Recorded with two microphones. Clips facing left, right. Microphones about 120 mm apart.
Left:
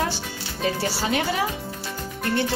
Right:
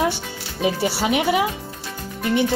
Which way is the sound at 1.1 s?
15° right (ahead or behind).